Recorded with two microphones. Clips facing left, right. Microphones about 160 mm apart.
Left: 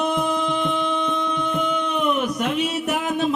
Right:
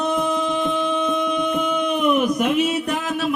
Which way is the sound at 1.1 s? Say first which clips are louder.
Right 3 dB; 10° right (ahead or behind).